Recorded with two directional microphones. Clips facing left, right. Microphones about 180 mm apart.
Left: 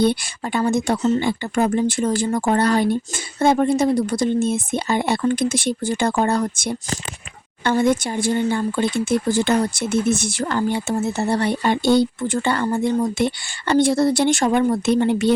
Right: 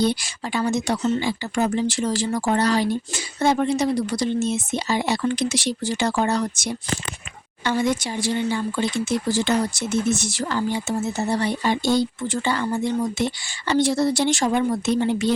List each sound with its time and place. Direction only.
0.0 s speech: 55° left (ahead or behind)